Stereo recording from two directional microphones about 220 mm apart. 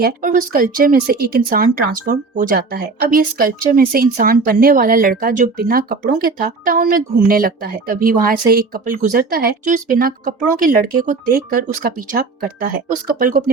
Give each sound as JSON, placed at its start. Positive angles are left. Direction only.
{"t": 0.0, "sound": "speech", "side_deg": -40}